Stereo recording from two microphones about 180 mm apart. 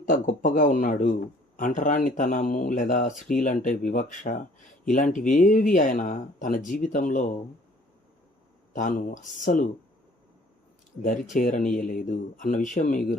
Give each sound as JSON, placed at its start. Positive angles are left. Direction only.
{"t": 0.0, "sound": "speech", "side_deg": 45}
{"t": 8.7, "sound": "speech", "side_deg": 45}
{"t": 11.0, "sound": "speech", "side_deg": 45}